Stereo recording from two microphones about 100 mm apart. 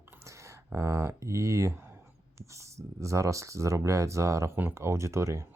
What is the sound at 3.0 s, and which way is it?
Speech, 30° right (ahead or behind).